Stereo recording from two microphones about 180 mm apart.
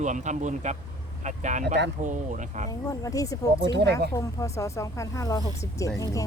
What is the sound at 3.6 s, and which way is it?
Speech, 70° right (ahead or behind).